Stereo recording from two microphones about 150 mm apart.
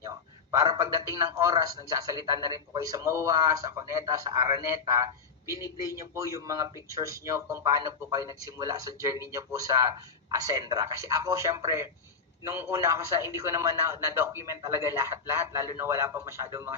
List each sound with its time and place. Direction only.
0.5 s a man's voice: 25° right (ahead or behind)